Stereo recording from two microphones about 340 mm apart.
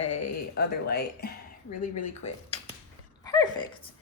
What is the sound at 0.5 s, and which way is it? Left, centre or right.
Speech, left.